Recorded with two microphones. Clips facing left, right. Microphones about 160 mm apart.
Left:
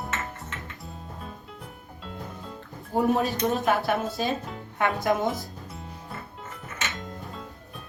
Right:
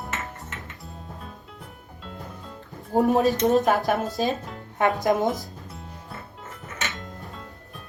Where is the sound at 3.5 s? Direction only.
40° right (ahead or behind).